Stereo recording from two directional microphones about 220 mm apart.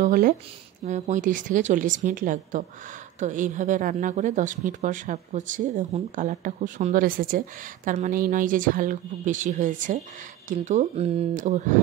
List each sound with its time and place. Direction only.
0.0 s speech: 35° right (ahead or behind)